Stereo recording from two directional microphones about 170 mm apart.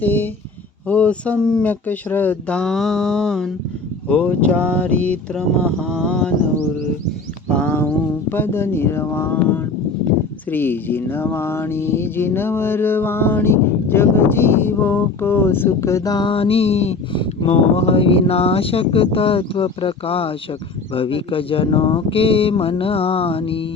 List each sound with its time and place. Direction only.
0.0 s a sound: 10° left (ahead or behind)
0.9 s speech: 10° left (ahead or behind)
4.1 s music: 5° left (ahead or behind)
7.5 s music: 5° left (ahead or behind); by 20.3 s 35° left (ahead or behind)
20.9 s speech: 30° left (ahead or behind)